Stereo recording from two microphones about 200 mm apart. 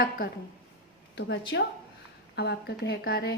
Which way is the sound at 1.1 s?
60° left (ahead or behind).